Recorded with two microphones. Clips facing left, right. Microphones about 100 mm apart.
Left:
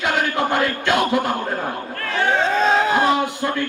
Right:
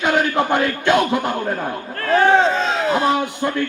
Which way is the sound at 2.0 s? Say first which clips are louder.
Right 7 dB; 40° right (ahead or behind).